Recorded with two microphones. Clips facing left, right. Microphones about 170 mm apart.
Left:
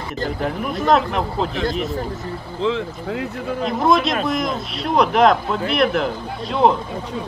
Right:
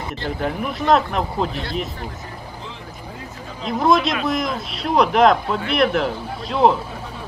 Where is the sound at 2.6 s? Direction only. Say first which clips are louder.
Left 14 dB; 85° left.